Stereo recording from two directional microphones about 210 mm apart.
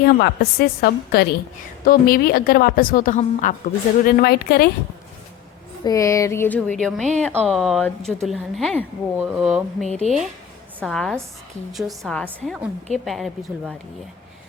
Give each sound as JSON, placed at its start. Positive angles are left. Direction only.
{"t": 0.0, "sound": "a woman's voice", "side_deg": 45}
{"t": 5.8, "sound": "a woman's voice", "side_deg": 15}
{"t": 9.1, "sound": "speech", "side_deg": -5}
{"t": 9.8, "sound": "speech", "side_deg": 35}
{"t": 10.8, "sound": "a woman's voice", "side_deg": 5}